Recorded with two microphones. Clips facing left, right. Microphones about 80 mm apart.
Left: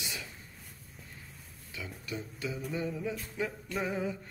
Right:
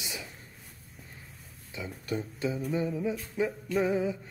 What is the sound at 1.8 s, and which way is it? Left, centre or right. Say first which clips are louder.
Speech: right 6 dB; right.